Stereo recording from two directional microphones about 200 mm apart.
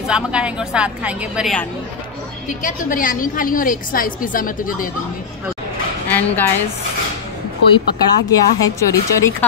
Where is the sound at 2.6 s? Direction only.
40° left (ahead or behind).